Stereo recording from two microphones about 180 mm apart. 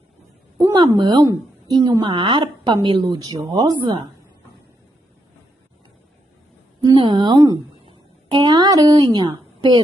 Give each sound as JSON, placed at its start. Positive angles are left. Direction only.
{"t": 0.6, "sound": "a woman's voice", "side_deg": -20}
{"t": 6.8, "sound": "speech", "side_deg": -25}